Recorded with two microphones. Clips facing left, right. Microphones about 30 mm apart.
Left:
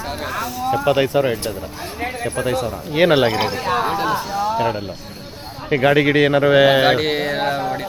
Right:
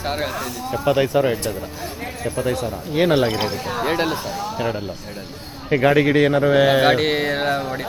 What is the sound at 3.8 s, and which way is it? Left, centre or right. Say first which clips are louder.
Speech: even; centre.